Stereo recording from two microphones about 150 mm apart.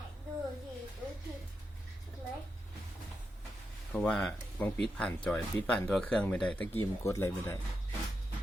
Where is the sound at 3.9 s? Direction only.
5° left (ahead or behind).